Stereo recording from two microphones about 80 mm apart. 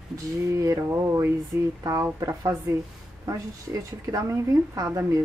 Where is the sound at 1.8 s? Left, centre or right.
Right.